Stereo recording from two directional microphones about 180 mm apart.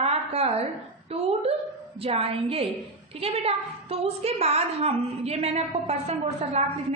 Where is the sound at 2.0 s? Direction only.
30° right (ahead or behind).